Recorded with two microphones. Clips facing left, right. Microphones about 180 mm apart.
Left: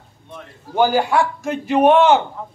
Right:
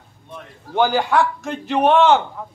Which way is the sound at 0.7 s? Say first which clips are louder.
Left 1 dB; 10° left (ahead or behind).